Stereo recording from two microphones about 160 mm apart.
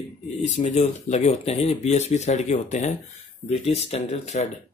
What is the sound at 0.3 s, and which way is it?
A man's voice, 45° left (ahead or behind).